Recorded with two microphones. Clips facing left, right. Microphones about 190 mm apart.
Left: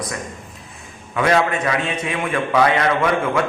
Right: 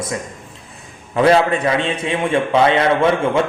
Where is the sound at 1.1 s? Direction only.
30° right (ahead or behind).